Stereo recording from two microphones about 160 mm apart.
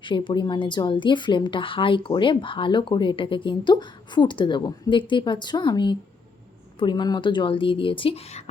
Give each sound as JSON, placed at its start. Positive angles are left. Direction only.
{"t": 0.0, "sound": "a woman's voice", "side_deg": 30}